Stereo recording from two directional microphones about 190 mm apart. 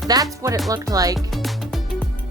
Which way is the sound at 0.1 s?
20° right (ahead or behind).